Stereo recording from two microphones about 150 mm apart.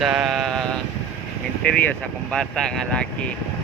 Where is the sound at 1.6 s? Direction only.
5° left (ahead or behind).